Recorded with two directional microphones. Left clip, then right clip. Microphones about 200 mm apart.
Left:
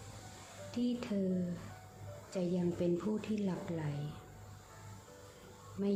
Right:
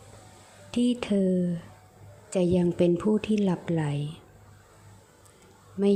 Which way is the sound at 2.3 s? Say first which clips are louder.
Right 12 dB; 40° right (ahead or behind).